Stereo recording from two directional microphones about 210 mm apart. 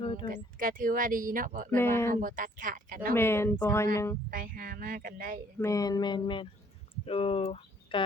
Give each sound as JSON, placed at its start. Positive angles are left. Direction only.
{"t": 0.0, "sound": "speech", "side_deg": 25}
{"t": 0.3, "sound": "speech", "side_deg": -40}
{"t": 1.7, "sound": "speech", "side_deg": 10}
{"t": 2.2, "sound": "speech", "side_deg": -40}
{"t": 3.2, "sound": "speech", "side_deg": 10}
{"t": 4.3, "sound": "speech", "side_deg": -40}
{"t": 5.5, "sound": "speech", "side_deg": 15}